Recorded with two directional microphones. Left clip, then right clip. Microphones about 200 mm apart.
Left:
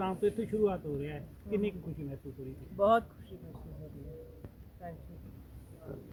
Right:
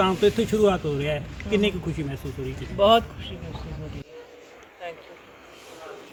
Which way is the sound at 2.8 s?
15° left (ahead or behind).